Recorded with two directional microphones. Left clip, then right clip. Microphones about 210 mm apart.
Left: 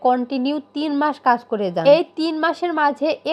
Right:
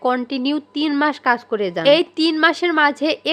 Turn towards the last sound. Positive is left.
turn(degrees=-10)  # may be behind; listen again after turning